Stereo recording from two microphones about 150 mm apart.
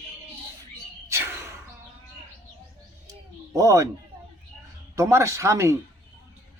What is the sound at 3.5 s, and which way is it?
Speech, 20° right (ahead or behind).